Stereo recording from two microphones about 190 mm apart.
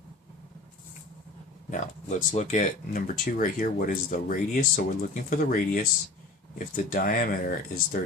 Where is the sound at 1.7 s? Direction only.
40° left (ahead or behind).